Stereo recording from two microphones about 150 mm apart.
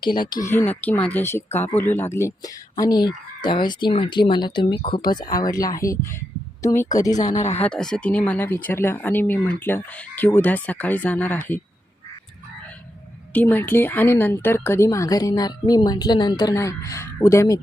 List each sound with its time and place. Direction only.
0.1 s speech: 30° left (ahead or behind)
0.4 s a woman's voice: 15° left (ahead or behind)
7.2 s speech: 55° left (ahead or behind)
7.6 s speech: 5° left (ahead or behind)
13.3 s a woman's voice: 10° left (ahead or behind)